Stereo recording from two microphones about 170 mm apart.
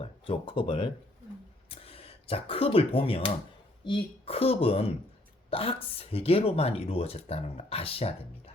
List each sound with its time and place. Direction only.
0.0 s speech: 30° left (ahead or behind)